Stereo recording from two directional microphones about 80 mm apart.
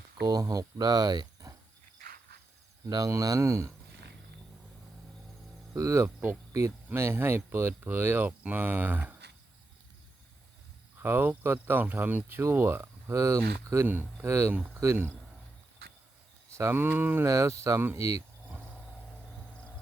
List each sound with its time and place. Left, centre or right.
0.3 s speech: right
2.8 s speech: right
5.7 s speech: right
11.0 s speech: right
13.8 s speech: right
16.5 s speech: right
17.2 s speech: right